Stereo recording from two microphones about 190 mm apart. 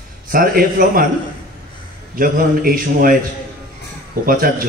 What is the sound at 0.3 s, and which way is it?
Speech, 50° right (ahead or behind).